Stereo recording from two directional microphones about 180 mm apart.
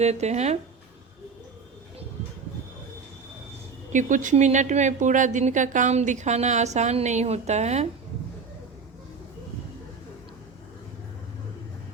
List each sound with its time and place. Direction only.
0.0 s speech: 40° right (ahead or behind)
3.9 s speech: 45° right (ahead or behind)